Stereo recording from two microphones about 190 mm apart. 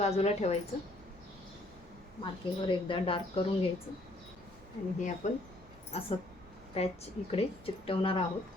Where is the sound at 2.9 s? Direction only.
30° left (ahead or behind).